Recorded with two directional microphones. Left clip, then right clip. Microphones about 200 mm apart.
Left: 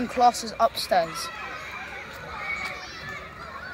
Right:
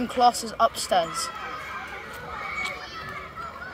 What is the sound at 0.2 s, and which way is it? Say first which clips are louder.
Speech: even; 15° left (ahead or behind).